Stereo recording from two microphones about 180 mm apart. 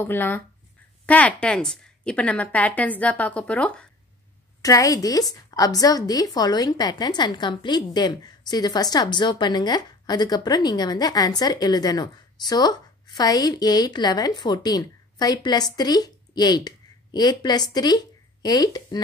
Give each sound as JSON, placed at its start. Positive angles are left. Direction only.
{"t": 0.0, "sound": "a woman's voice", "side_deg": 10}
{"t": 4.6, "sound": "speech", "side_deg": 20}